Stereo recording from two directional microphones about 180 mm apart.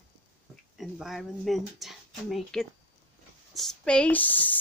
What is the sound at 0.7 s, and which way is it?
A woman's voice, centre (ahead or behind).